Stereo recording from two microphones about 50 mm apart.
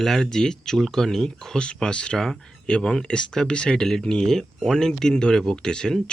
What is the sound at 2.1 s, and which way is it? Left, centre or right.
Speech, centre.